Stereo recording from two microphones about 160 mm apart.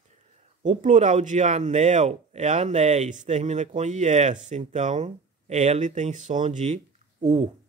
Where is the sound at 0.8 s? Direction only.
50° right (ahead or behind).